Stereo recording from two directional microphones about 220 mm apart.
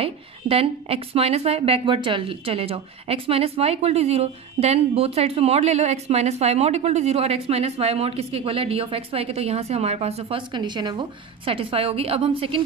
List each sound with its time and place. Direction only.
0.0 s a woman's voice: 25° right (ahead or behind)